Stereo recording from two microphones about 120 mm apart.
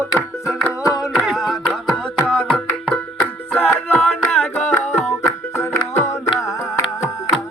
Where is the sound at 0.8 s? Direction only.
30° left (ahead or behind).